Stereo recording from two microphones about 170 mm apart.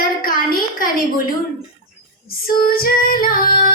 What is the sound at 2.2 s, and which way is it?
A woman's voice, 60° left (ahead or behind).